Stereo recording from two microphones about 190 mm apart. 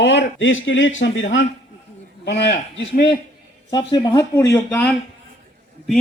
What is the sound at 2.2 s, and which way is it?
Speech, 60° left (ahead or behind).